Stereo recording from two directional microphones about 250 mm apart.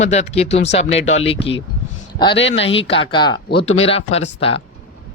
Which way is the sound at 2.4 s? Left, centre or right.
Left.